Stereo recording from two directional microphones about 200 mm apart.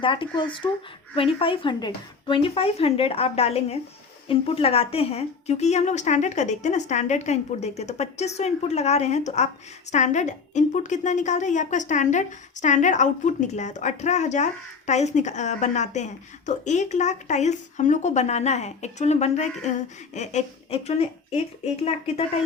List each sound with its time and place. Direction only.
0.0 s a woman's voice: 25° left (ahead or behind)